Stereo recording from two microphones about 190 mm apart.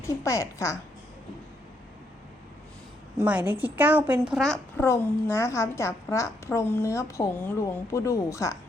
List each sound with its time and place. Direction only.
0.0 s a woman's voice: 15° left (ahead or behind)
3.2 s a woman's voice: 10° right (ahead or behind)
4.9 s a woman's voice: 15° left (ahead or behind)